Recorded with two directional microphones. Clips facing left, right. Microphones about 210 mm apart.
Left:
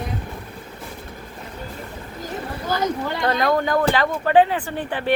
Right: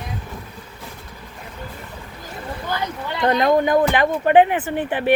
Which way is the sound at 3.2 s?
20° right (ahead or behind).